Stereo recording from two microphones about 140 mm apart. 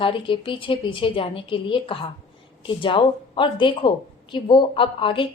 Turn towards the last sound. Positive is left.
turn(degrees=40)  # may be behind; listen again after turning